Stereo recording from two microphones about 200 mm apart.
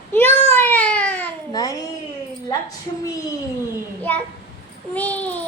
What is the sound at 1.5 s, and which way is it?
Speech, 20° left (ahead or behind).